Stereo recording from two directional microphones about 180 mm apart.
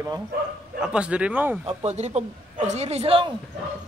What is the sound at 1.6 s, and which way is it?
Speech, 40° right (ahead or behind).